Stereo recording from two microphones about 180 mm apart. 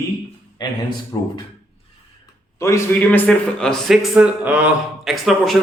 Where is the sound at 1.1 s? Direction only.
20° left (ahead or behind).